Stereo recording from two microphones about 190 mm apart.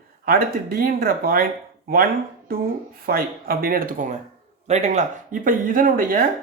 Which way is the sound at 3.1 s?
50° right (ahead or behind).